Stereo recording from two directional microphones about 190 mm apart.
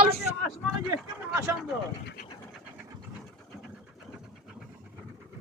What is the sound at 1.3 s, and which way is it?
Speech, 10° right (ahead or behind).